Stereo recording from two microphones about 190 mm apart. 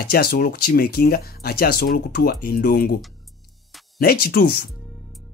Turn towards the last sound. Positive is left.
turn(degrees=55)  # may be behind; listen again after turning